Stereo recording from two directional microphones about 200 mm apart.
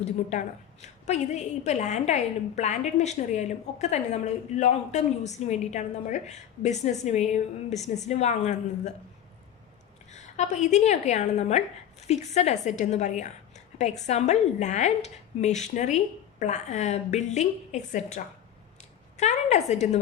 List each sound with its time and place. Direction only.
0.0 s a woman's voice: 35° left (ahead or behind)
10.1 s a woman's voice: 35° left (ahead or behind)